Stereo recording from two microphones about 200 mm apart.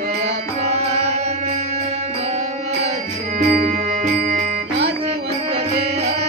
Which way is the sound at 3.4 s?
40° right (ahead or behind).